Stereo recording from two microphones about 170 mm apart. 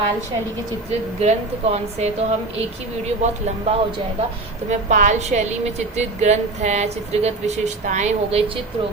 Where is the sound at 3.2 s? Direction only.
40° right (ahead or behind).